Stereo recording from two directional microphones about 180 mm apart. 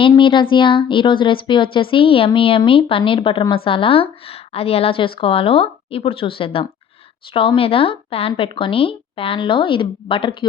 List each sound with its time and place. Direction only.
0.0 s speech: 30° left (ahead or behind)